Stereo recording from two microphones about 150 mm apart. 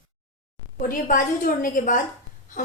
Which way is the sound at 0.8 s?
60° left (ahead or behind).